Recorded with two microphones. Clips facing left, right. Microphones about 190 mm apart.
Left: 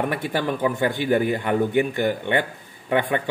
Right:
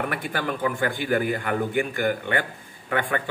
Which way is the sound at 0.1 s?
25° left (ahead or behind).